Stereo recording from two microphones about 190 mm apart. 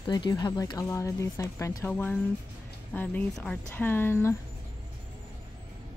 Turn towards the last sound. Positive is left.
turn(degrees=10)  # may be behind; listen again after turning